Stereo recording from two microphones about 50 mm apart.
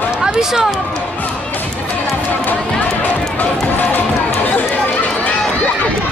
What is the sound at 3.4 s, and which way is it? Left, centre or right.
Run, left.